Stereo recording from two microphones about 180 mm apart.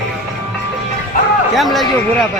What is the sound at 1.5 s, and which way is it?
Speech, centre (ahead or behind).